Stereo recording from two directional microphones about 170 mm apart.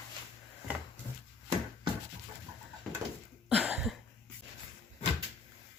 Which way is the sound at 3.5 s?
5° right (ahead or behind).